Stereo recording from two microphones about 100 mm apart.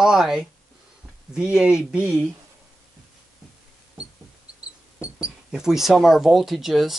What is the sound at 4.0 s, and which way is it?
Knock, 10° right (ahead or behind).